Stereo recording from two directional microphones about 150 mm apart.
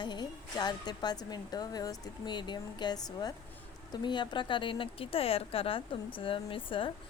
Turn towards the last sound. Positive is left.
turn(degrees=35)  # may be behind; listen again after turning